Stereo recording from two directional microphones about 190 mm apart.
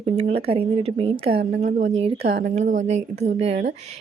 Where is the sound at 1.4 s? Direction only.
60° right (ahead or behind).